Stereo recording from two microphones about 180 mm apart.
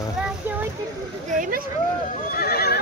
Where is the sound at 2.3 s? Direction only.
55° left (ahead or behind).